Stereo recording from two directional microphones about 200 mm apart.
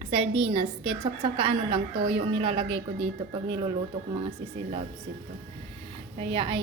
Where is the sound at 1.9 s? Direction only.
60° right (ahead or behind).